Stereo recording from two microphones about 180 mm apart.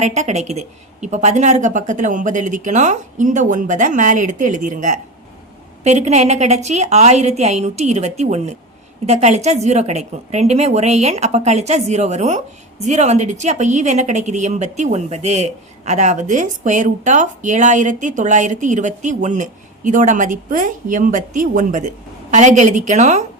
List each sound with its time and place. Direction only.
0.0 s a woman's voice: 40° right (ahead or behind)